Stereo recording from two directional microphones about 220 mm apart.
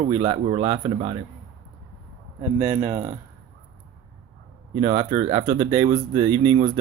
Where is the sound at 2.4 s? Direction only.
15° right (ahead or behind).